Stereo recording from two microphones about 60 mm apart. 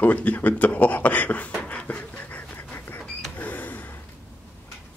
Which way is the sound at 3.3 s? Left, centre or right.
Left.